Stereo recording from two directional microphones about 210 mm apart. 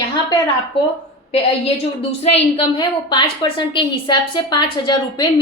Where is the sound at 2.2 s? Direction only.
25° left (ahead or behind).